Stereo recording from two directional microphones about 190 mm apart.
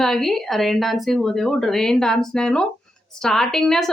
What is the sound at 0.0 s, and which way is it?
A woman's voice, centre (ahead or behind).